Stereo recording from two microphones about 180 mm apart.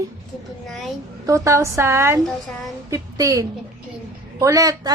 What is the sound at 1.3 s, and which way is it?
A woman's voice, 15° right (ahead or behind).